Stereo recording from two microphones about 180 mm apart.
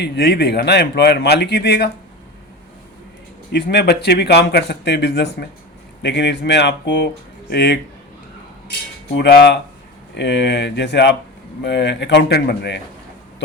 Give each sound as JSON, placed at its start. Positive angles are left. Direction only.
{"t": 0.0, "sound": "speech", "side_deg": 70}
{"t": 3.5, "sound": "speech", "side_deg": 70}
{"t": 9.1, "sound": "speech", "side_deg": 70}